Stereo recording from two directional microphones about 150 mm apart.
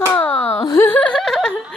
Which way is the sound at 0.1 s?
15° left (ahead or behind).